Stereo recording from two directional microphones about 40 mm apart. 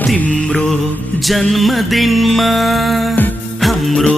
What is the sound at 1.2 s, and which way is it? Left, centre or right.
Music, centre.